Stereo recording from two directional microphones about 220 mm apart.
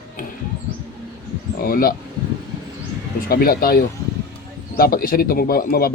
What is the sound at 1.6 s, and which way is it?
Speech, 40° left (ahead or behind).